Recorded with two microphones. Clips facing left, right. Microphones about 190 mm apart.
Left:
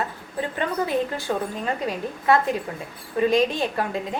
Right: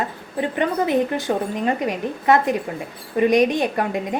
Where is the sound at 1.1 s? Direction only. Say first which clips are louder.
Right 4 dB; 20° right (ahead or behind).